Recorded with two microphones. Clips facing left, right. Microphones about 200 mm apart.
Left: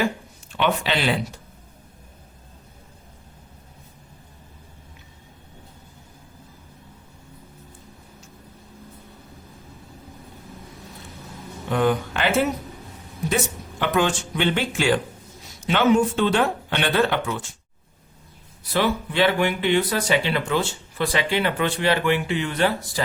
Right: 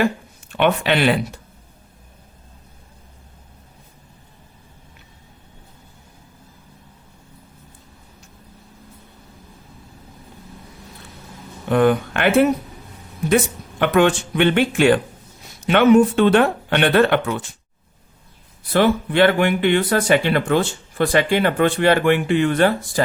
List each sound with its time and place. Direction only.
0.5 s speech: 60° right (ahead or behind)
11.7 s speech: 60° right (ahead or behind)
18.7 s speech: 55° right (ahead or behind)